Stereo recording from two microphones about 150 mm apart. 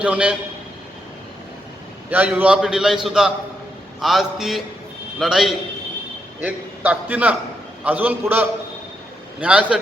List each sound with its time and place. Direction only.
0.0 s a man's voice: 10° right (ahead or behind)
2.0 s a man's voice: 10° right (ahead or behind)